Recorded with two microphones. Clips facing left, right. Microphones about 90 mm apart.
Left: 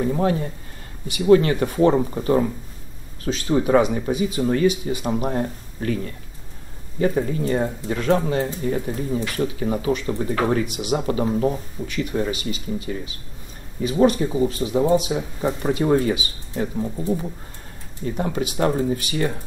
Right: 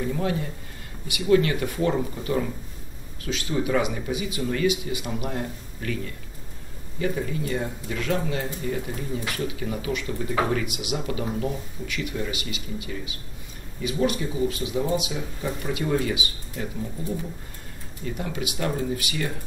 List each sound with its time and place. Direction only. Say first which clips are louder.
0.0 s speech: left 6 dB; 35° left (ahead or behind)